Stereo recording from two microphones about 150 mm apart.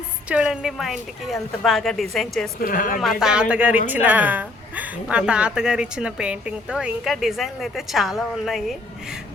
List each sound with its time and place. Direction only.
0.3 s speech: 5° right (ahead or behind)
2.6 s speech: 65° left (ahead or behind)
3.0 s speech: centre (ahead or behind)